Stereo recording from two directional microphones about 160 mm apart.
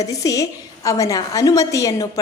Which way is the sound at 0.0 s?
20° left (ahead or behind).